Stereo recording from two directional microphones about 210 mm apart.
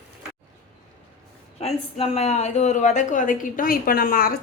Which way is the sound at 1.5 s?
30° left (ahead or behind).